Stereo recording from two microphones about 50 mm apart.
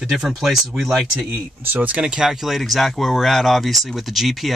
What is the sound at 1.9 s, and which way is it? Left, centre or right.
Speech, right.